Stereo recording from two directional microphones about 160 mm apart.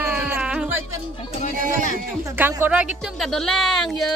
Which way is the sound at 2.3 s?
10° right (ahead or behind).